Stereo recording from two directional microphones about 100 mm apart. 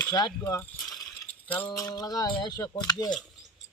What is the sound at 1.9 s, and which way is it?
Speech, 40° left (ahead or behind).